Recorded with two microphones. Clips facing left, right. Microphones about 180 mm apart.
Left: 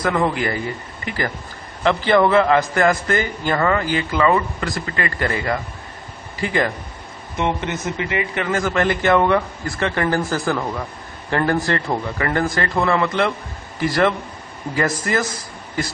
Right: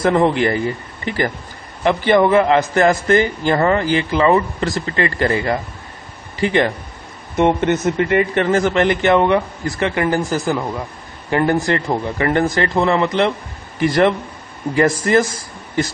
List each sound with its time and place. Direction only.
0.0 s a man's voice: 25° right (ahead or behind)
7.3 s speech: 55° right (ahead or behind)
8.4 s a man's voice: 35° right (ahead or behind)